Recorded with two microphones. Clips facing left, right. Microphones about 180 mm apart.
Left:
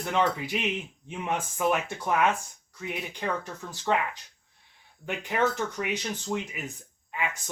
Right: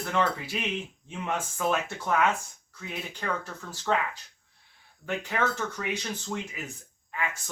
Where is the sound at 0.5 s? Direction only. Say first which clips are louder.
Left 2 dB; 15° left (ahead or behind).